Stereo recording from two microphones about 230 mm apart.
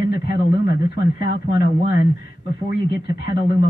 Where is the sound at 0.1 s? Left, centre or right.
Left.